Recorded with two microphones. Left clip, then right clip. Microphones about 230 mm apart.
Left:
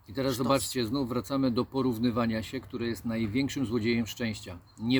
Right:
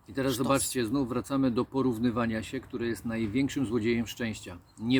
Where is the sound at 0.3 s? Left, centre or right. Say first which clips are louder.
Left 1 dB; centre.